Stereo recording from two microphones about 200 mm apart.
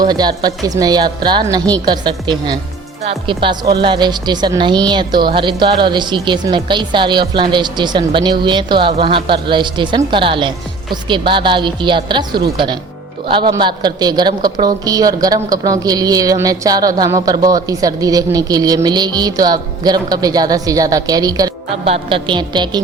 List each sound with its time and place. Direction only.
0.0 s a woman's voice: 20° right (ahead or behind)
21.7 s a woman's voice: 30° right (ahead or behind)